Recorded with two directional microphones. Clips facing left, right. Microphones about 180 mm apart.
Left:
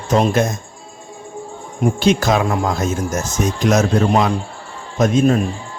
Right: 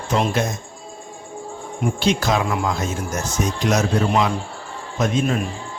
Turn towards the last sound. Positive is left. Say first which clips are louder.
# left 6 dB
turn(degrees=45)  # may be behind; listen again after turning